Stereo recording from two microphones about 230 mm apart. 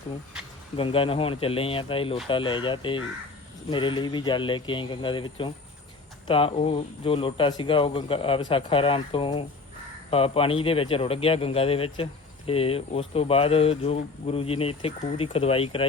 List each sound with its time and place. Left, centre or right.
0.8 s speech: left